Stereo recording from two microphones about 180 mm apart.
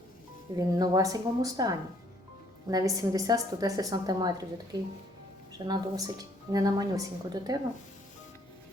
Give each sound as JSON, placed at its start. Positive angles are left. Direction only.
{"t": 0.5, "sound": "a woman's voice", "side_deg": -20}